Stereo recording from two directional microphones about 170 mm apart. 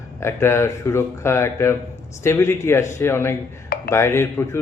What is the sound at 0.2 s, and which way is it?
A man's voice, 15° left (ahead or behind).